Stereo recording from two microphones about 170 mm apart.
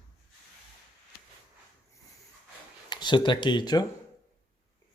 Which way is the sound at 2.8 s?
25° left (ahead or behind).